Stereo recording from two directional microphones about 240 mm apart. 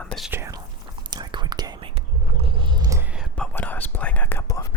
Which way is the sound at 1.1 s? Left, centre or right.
Centre.